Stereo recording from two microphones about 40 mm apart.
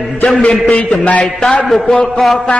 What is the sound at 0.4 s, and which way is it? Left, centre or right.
Speech, left.